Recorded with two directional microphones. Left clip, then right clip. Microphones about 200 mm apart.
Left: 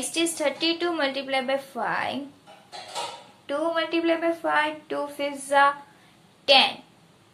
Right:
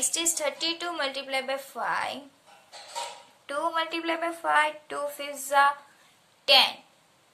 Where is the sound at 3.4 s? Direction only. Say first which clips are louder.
Left 3 dB; 30° right (ahead or behind).